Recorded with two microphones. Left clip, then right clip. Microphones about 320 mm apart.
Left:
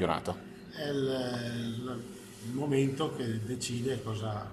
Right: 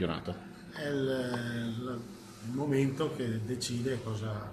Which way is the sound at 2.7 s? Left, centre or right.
Centre.